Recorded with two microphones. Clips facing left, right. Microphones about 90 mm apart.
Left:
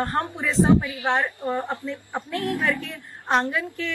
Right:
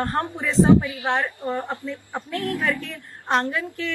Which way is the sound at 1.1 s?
20° left (ahead or behind).